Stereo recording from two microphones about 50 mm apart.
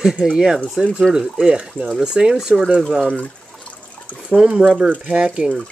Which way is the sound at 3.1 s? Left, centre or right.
Left.